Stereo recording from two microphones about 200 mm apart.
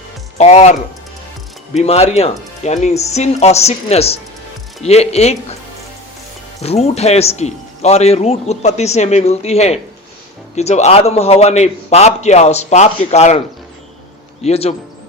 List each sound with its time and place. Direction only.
0.3 s a man's voice: 35° left (ahead or behind)
6.6 s a man's voice: 30° left (ahead or behind)
14.4 s a man's voice: 30° left (ahead or behind)